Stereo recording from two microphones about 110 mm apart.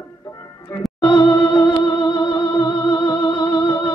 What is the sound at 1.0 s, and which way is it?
Music, 50° left (ahead or behind).